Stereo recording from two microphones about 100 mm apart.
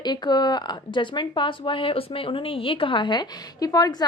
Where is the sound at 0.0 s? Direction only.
45° left (ahead or behind).